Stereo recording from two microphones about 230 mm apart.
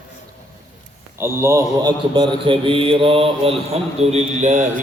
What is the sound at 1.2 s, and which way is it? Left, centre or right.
A man's voice, centre.